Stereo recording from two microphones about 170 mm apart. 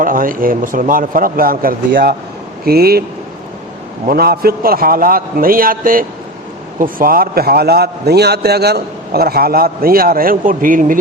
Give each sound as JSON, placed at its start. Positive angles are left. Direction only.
{"t": 0.0, "sound": "a man's voice", "side_deg": -55}
{"t": 4.0, "sound": "a man's voice", "side_deg": -65}